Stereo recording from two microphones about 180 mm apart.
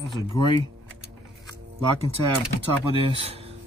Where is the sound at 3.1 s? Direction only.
35° right (ahead or behind).